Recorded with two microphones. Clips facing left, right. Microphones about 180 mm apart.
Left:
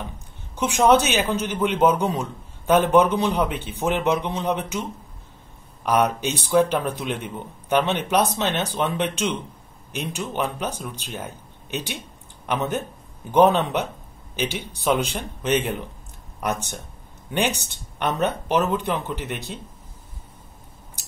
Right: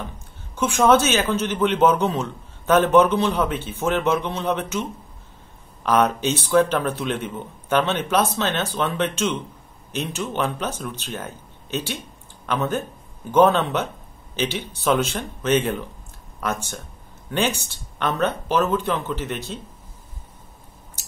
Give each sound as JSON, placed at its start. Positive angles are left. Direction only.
{"t": 0.6, "sound": "a man's voice", "side_deg": 15}
{"t": 5.9, "sound": "a man's voice", "side_deg": 10}